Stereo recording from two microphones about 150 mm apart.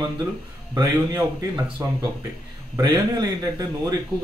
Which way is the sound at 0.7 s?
25° right (ahead or behind).